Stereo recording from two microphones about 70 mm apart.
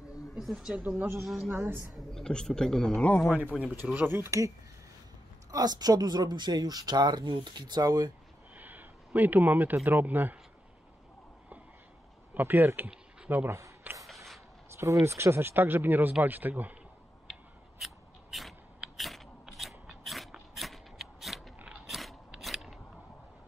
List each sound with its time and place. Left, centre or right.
0.3 s speech: centre
1.2 s a woman's voice: centre
1.5 s a woman's voice: right
2.0 s a man's voice: centre
3.3 s speech: centre
5.5 s speech: right
8.5 s a sound: right
9.8 s speech: right
12.4 s a woman's voice: right
14.0 s a sound: centre
15.0 s speech: right
17.3 s scissors: centre